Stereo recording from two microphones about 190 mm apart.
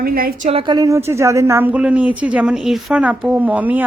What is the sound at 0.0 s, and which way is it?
Speech, 50° right (ahead or behind).